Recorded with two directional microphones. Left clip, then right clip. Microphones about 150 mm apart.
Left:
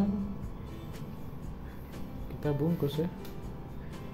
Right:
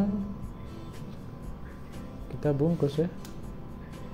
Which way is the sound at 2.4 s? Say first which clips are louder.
Right 5 dB; 20° right (ahead or behind).